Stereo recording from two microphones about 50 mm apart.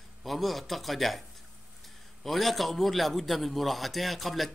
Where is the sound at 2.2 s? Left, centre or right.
Centre.